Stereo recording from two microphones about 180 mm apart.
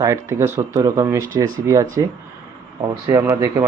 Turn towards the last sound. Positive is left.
turn(degrees=-20)  # may be behind; listen again after turning